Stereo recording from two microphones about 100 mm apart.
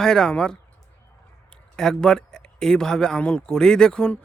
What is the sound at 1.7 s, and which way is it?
Speech, 5° left (ahead or behind).